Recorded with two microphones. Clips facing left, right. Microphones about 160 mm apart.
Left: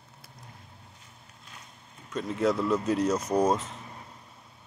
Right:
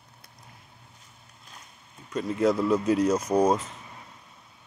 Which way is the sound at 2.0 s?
Centre (ahead or behind).